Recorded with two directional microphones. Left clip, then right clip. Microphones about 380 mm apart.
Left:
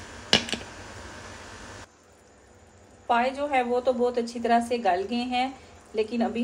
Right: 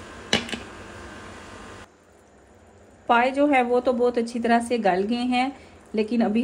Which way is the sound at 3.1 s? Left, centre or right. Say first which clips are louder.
Right 5 dB; centre.